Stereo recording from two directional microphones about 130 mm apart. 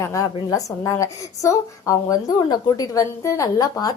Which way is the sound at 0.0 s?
25° left (ahead or behind).